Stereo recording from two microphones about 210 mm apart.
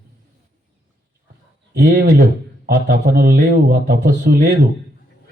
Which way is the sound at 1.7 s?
45° right (ahead or behind).